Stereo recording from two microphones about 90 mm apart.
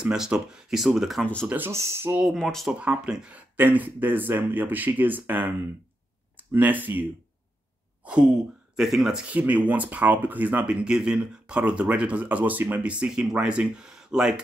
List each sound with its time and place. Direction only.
0.0 s speech: 10° right (ahead or behind)
1.2 s speech: 10° left (ahead or behind)
1.7 s speech: 30° right (ahead or behind)
2.3 s speech: 5° left (ahead or behind)
2.7 s speech: 10° right (ahead or behind)
8.7 s speech: centre (ahead or behind)
9.3 s speech: 15° right (ahead or behind)